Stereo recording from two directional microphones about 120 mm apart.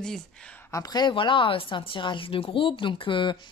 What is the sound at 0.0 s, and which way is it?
Speech, 5° left (ahead or behind).